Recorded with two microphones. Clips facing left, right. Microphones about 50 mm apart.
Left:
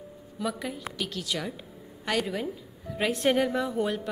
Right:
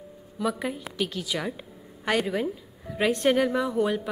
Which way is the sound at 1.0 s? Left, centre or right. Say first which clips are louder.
Right 4 dB; centre.